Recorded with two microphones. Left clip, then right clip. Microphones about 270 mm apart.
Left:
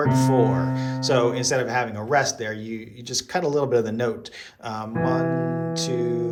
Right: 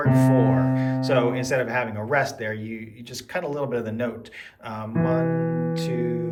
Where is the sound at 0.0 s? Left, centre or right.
Centre.